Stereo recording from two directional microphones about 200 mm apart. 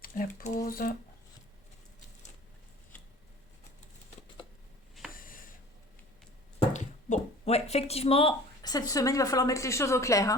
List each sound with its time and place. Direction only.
0.0 s speech: 45° left (ahead or behind)
5.1 s a sound: 45° left (ahead or behind)
6.6 s speech: 35° left (ahead or behind); by 10.3 s 15° left (ahead or behind)